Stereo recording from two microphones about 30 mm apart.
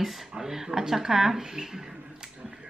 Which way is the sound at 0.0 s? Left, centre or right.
Centre.